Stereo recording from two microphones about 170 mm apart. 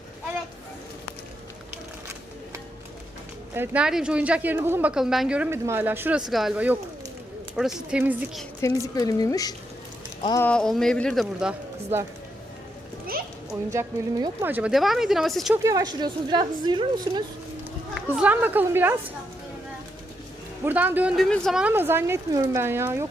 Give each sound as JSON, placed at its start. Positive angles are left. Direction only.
{"t": 3.5, "sound": "speech", "side_deg": -10}
{"t": 8.6, "sound": "speech", "side_deg": 20}
{"t": 10.4, "sound": "speech", "side_deg": 5}
{"t": 13.5, "sound": "speech", "side_deg": -20}
{"t": 15.5, "sound": "a woman's voice", "side_deg": -20}
{"t": 17.9, "sound": "speech", "side_deg": -10}
{"t": 20.7, "sound": "speech", "side_deg": -10}
{"t": 21.2, "sound": "speech", "side_deg": 5}
{"t": 21.6, "sound": "speech", "side_deg": -10}